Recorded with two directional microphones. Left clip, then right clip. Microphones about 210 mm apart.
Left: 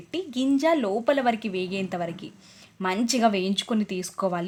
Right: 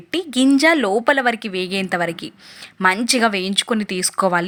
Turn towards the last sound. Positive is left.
turn(degrees=-15)  # may be behind; listen again after turning